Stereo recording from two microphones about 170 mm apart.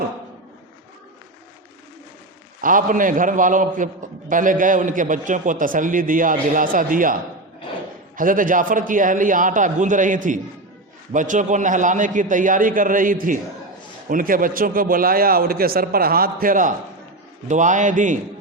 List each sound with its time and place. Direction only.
2.6 s a man's voice: 55° right (ahead or behind)